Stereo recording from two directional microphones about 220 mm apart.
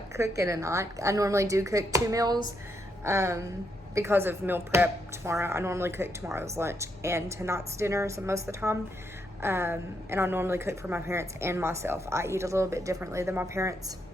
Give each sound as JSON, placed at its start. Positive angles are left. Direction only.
{"t": 0.1, "sound": "a woman's voice", "side_deg": -15}